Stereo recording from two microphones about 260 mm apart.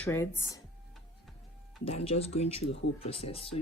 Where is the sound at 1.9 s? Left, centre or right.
Left.